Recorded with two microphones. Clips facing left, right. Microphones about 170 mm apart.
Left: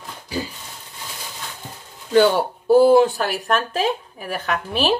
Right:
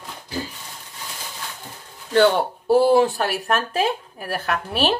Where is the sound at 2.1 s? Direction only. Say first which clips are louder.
Left 1 dB; centre (ahead or behind).